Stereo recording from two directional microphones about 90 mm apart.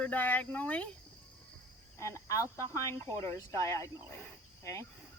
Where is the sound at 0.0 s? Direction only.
20° left (ahead or behind).